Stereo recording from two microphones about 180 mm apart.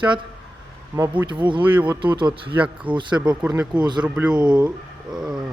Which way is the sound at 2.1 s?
25° right (ahead or behind).